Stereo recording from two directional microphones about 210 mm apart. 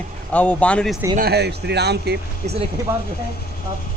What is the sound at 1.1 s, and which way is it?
Speech, 50° right (ahead or behind).